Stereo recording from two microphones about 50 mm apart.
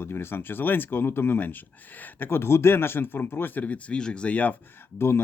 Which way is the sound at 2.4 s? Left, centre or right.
Left.